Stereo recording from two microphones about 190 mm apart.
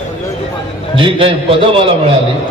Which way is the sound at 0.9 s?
30° right (ahead or behind).